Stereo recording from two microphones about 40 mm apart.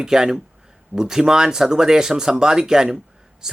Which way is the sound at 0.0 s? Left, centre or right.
Centre.